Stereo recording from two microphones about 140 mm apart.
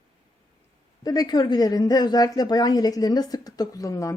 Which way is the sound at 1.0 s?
25° left (ahead or behind).